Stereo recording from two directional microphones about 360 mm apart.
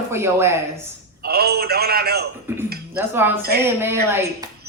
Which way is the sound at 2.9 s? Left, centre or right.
Centre.